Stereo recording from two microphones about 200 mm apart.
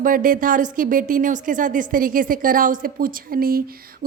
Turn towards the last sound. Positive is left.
turn(degrees=-45)  # may be behind; listen again after turning